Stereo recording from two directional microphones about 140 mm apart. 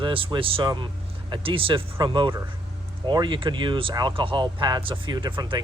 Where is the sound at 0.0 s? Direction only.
35° right (ahead or behind).